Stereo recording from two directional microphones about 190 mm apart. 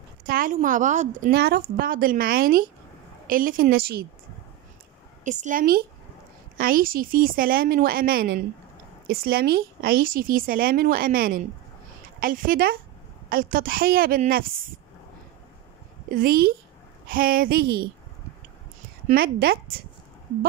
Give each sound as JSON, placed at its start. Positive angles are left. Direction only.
{"t": 0.3, "sound": "speech", "side_deg": -45}
{"t": 1.3, "sound": "speech", "side_deg": -55}
{"t": 5.2, "sound": "speech", "side_deg": -40}
{"t": 16.1, "sound": "speech", "side_deg": -50}
{"t": 19.0, "sound": "speech", "side_deg": -50}